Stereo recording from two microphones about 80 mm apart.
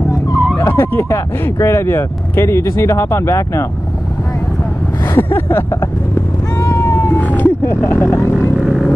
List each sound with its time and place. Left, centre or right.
0.6 s speech: left
5.0 s speech: left
6.5 s cat: left
7.2 s vehicle: centre
7.6 s speech: left
8.5 s a sound: centre